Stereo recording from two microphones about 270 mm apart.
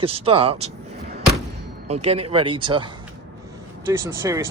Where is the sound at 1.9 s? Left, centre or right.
Right.